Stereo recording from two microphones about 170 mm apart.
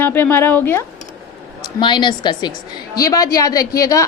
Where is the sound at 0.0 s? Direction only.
10° left (ahead or behind).